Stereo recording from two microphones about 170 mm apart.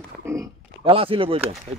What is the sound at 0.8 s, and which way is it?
Speech, 35° right (ahead or behind).